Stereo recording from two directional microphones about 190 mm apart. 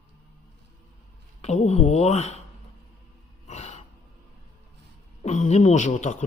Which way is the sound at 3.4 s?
35° left (ahead or behind).